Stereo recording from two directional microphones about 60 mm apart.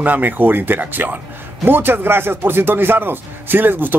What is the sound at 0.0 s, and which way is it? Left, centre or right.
Speech, right.